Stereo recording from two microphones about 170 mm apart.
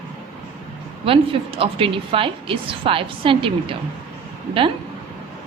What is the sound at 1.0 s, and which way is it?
A woman's voice, 35° right (ahead or behind).